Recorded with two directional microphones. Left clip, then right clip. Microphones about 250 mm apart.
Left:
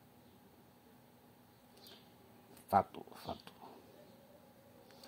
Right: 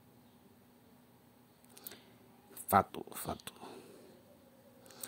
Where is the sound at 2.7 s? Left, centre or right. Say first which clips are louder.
Right 3 dB; right.